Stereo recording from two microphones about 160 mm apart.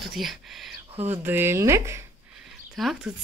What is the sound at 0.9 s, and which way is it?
Speech, 40° right (ahead or behind).